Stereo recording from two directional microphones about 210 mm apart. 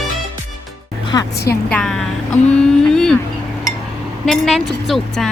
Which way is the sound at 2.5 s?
5° left (ahead or behind).